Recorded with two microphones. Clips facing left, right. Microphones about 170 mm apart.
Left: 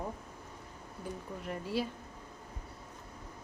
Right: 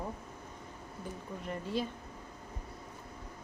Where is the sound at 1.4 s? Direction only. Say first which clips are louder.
Even; 5° left (ahead or behind).